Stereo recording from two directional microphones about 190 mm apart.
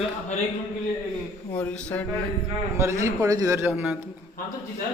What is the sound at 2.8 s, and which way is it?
Speech, 15° right (ahead or behind).